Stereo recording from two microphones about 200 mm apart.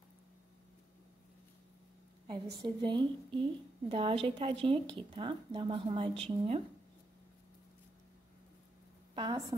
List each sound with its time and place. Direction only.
2.2 s a woman's voice: 25° right (ahead or behind)
9.1 s a woman's voice: 20° right (ahead or behind)